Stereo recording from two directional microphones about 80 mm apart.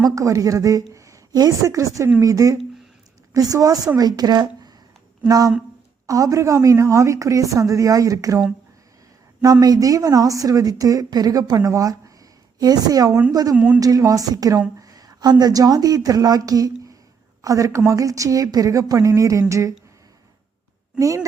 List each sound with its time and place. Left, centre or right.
0.0 s a woman's voice: right
9.4 s a woman's voice: right
21.0 s a woman's voice: right